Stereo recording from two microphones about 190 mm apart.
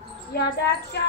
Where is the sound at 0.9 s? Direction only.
65° left (ahead or behind).